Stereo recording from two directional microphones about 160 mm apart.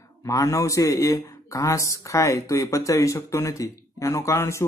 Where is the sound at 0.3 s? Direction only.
20° left (ahead or behind).